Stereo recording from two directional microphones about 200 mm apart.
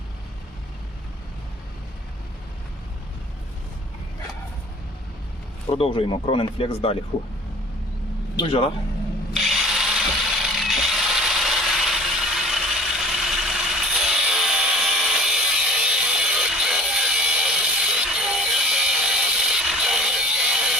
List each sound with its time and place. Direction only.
5.7 s speech: 30° left (ahead or behind)
8.4 s speech: 25° left (ahead or behind)
9.3 s tools: centre (ahead or behind)